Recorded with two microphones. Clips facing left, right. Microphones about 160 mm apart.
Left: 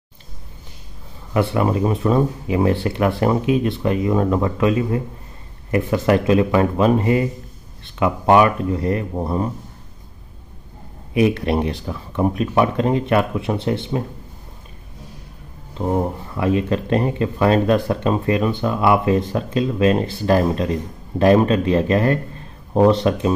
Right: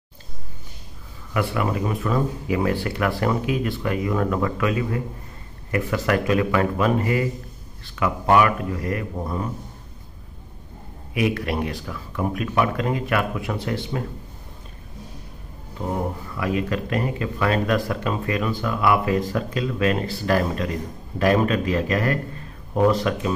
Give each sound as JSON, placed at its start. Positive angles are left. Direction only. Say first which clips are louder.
{"t": 1.3, "sound": "speech", "louder": "left 5 dB", "side_deg": 30}
{"t": 11.1, "sound": "speech", "louder": "left 6 dB", "side_deg": 25}
{"t": 15.8, "sound": "speech", "louder": "left 6 dB", "side_deg": 25}